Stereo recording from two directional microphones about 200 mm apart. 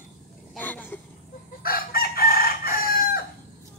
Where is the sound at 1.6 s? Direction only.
50° left (ahead or behind).